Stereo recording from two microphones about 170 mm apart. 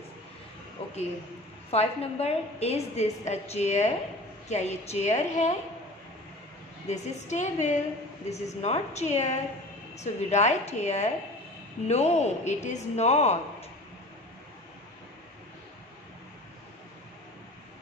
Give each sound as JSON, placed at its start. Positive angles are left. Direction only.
{"t": 1.7, "sound": "a woman's voice", "side_deg": 35}
{"t": 6.9, "sound": "a woman's voice", "side_deg": 45}